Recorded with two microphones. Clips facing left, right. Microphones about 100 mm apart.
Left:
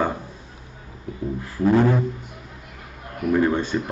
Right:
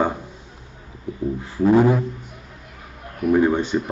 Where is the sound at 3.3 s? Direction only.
15° right (ahead or behind).